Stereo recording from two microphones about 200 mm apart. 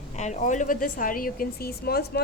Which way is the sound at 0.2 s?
35° left (ahead or behind).